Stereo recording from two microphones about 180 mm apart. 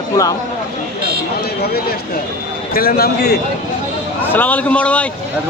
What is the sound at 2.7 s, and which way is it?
Speech, 55° left (ahead or behind).